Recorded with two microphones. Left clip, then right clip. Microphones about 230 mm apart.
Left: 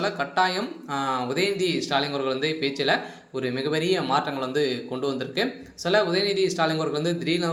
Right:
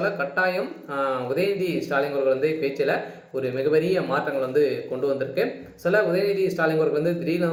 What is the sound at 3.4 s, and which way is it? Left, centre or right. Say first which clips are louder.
Speech: right 4 dB; left.